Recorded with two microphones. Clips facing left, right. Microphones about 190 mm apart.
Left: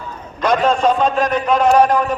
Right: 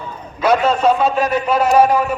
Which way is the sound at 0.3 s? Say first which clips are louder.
Right 1 dB; 5° right (ahead or behind).